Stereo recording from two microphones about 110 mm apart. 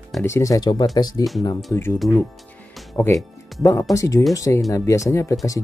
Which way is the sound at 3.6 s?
30° left (ahead or behind).